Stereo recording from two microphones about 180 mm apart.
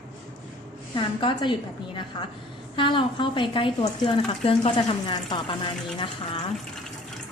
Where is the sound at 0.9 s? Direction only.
25° left (ahead or behind).